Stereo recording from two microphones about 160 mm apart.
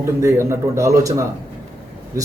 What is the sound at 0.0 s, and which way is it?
Speech, 15° right (ahead or behind).